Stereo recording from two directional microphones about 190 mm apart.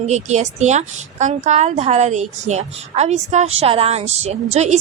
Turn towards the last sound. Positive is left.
turn(degrees=-35)  # may be behind; listen again after turning